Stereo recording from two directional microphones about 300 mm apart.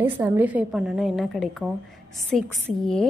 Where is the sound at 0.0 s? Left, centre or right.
Centre.